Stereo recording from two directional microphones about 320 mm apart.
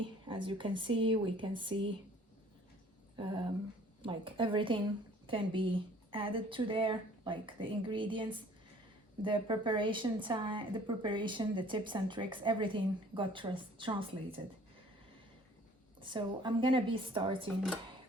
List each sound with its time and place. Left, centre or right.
0.0 s a woman's voice: centre
3.2 s a woman's voice: centre
16.0 s a woman's voice: centre